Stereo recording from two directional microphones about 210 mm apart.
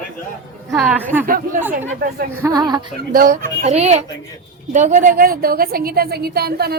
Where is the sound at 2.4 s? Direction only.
20° right (ahead or behind).